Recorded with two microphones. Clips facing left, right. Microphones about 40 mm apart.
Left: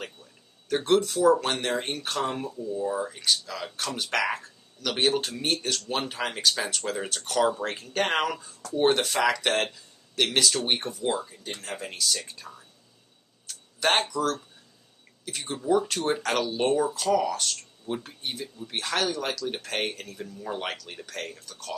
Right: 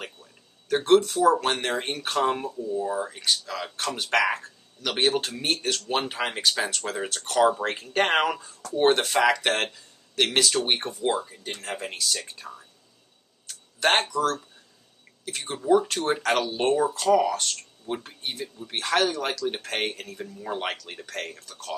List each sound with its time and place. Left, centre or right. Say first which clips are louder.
0.0 s speech: even; centre
11.9 s speech: even; centre
13.7 s speech: right 2 dB; centre